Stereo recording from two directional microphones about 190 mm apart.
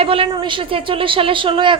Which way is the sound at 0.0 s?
30° right (ahead or behind).